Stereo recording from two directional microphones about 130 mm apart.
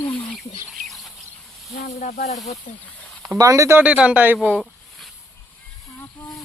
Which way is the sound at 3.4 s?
25° right (ahead or behind).